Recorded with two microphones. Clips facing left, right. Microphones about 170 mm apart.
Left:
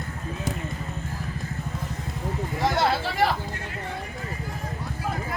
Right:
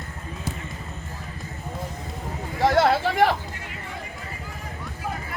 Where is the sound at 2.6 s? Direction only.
60° right (ahead or behind).